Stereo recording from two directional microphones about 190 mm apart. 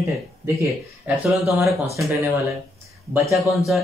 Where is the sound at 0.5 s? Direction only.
15° right (ahead or behind).